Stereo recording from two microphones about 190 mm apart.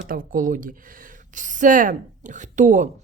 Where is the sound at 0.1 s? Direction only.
45° right (ahead or behind).